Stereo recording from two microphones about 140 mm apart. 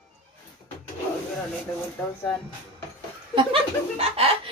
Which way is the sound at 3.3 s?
40° right (ahead or behind).